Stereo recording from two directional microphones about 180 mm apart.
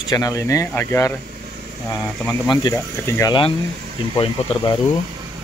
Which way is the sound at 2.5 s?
20° left (ahead or behind).